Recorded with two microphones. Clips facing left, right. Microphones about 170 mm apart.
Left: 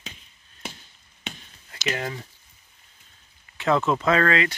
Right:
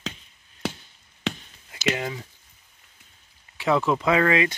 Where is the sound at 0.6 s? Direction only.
90° right.